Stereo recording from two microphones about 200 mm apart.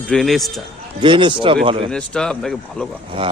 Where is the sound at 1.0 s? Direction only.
25° right (ahead or behind).